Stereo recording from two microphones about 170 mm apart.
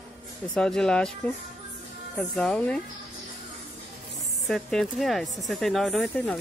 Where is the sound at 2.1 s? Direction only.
5° left (ahead or behind).